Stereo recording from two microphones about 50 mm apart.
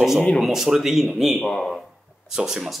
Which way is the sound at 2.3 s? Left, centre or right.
Centre.